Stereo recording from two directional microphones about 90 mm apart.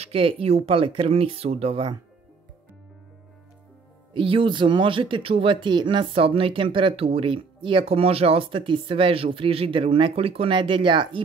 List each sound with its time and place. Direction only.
0.1 s speech: 90° right
4.1 s speech: 85° right; by 11.1 s 65° right (ahead or behind)